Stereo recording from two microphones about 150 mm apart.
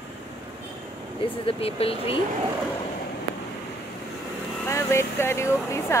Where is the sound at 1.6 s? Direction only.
40° left (ahead or behind).